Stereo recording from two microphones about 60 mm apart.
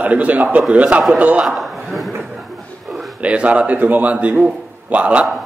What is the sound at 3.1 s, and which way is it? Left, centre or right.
A man's voice, right.